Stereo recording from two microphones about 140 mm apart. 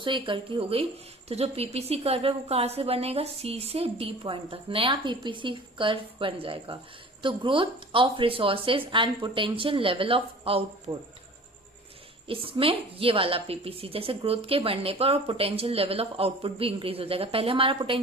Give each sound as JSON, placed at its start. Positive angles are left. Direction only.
{"t": 0.0, "sound": "a woman's voice", "side_deg": -35}
{"t": 10.9, "sound": "speech", "side_deg": -30}
{"t": 12.3, "sound": "a woman's voice", "side_deg": -40}